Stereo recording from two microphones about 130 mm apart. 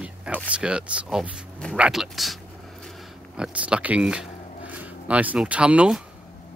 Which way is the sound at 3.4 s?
10° right (ahead or behind).